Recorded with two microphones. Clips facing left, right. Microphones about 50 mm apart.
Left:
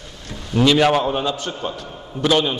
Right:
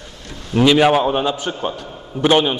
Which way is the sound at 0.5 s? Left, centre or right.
Centre.